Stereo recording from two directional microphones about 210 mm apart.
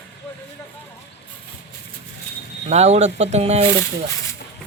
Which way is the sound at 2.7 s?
30° right (ahead or behind).